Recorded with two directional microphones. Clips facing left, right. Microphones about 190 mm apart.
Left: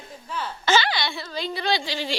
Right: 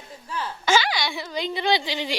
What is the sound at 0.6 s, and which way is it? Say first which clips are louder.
A woman's voice: even; 10° right (ahead or behind).